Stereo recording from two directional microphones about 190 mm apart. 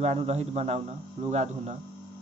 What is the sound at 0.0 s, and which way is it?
Speech, 35° right (ahead or behind).